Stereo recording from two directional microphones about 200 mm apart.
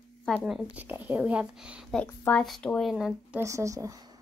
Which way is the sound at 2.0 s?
10° left (ahead or behind).